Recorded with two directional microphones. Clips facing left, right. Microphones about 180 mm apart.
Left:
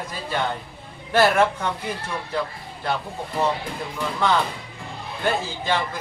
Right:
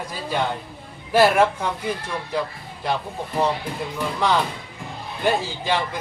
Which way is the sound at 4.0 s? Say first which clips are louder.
Even; 5° right (ahead or behind).